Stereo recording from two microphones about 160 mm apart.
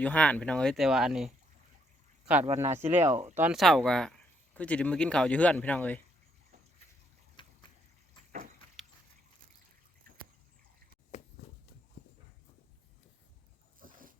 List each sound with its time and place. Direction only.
0.0 s speech: 10° left (ahead or behind); by 3.0 s 15° right (ahead or behind)
3.0 s speech: 45° right (ahead or behind)
3.3 s speech: 10° right (ahead or behind)
3.6 s speech: 5° left (ahead or behind)
7.4 s a sound: 30° left (ahead or behind)
13.7 s dog: 60° right (ahead or behind)